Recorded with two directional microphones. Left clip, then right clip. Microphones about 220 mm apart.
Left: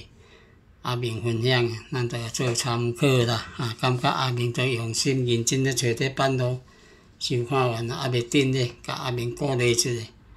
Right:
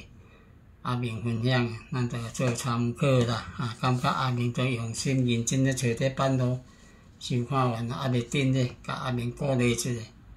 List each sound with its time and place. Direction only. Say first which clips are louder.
0.8 s speech: left 4 dB; 45° left (ahead or behind)